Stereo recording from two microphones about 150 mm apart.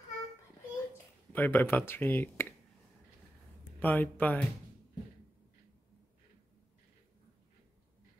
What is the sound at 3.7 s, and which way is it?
Speech, 10° left (ahead or behind).